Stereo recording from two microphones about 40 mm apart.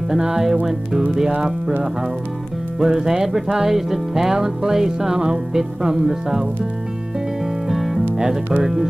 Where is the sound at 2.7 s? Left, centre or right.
Centre.